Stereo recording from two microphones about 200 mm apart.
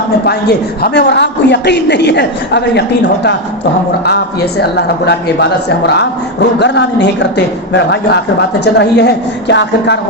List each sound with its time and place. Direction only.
0.3 s a woman's voice: 55° left (ahead or behind)
4.0 s a woman's voice: 55° left (ahead or behind)